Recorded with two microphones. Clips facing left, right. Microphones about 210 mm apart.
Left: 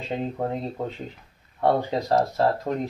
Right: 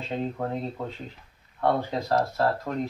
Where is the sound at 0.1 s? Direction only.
20° left (ahead or behind).